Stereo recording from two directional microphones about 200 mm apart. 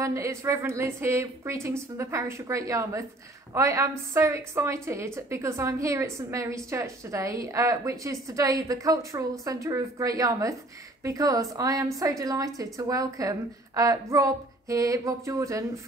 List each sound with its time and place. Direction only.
0.0 s a woman's voice: 15° right (ahead or behind)